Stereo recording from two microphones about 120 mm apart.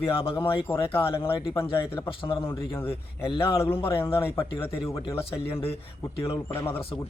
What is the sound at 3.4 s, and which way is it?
A man's voice, 20° left (ahead or behind).